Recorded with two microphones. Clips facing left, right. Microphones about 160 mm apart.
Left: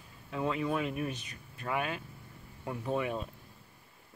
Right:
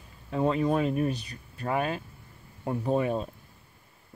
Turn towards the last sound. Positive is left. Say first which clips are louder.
# right 6 dB
turn(degrees=-35)  # may be behind; listen again after turning